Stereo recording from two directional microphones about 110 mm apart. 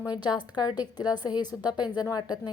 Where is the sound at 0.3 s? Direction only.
40° left (ahead or behind).